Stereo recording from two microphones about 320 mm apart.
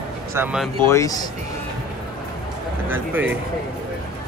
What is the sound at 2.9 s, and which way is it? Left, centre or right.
Speech, centre.